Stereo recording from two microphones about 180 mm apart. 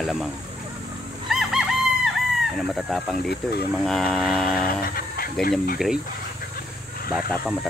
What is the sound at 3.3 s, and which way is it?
Speech, 60° left (ahead or behind).